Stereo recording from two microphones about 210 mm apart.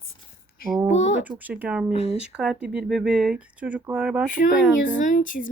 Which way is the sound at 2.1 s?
5° right (ahead or behind).